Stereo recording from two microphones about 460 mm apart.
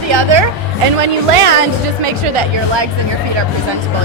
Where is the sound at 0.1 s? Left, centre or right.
Right.